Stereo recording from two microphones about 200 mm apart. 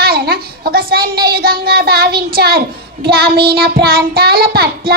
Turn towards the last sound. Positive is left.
turn(degrees=-50)  # may be behind; listen again after turning